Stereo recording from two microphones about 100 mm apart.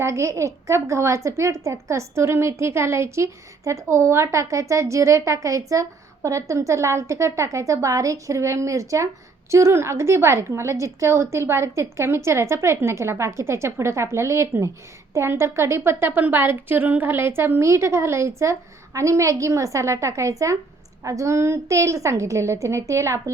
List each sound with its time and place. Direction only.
0.0 s a woman's voice: 30° right (ahead or behind)